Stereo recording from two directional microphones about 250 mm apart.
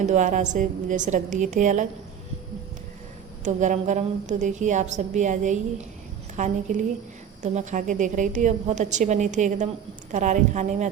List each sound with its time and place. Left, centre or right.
0.0 s a woman's voice: right
3.4 s a woman's voice: right